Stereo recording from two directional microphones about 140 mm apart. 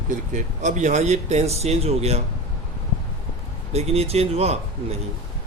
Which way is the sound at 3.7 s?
50° right (ahead or behind).